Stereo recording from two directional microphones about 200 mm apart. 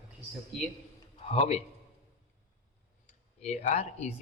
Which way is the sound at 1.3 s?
30° left (ahead or behind).